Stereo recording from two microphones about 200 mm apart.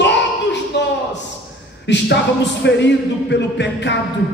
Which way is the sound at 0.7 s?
60° left (ahead or behind).